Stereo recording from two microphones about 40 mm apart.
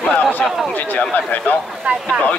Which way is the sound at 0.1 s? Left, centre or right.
Left.